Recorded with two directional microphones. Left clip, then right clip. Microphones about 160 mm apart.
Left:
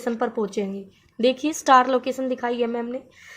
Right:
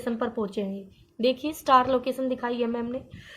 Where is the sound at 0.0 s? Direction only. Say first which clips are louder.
Left 4 dB; 40° left (ahead or behind).